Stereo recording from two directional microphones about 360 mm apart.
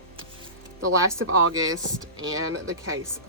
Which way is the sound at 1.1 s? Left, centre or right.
Right.